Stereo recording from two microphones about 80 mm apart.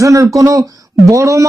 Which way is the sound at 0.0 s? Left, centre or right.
Right.